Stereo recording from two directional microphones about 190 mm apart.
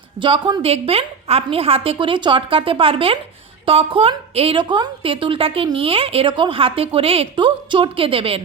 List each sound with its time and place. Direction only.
0.2 s a woman's voice: 25° right (ahead or behind)